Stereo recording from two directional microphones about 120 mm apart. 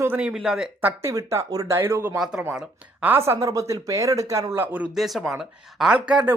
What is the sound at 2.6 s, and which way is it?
Speech, 15° right (ahead or behind).